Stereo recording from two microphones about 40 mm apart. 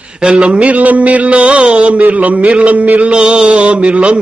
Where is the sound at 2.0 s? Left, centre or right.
Right.